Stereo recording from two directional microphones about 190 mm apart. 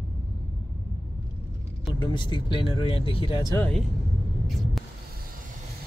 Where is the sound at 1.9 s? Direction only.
25° left (ahead or behind).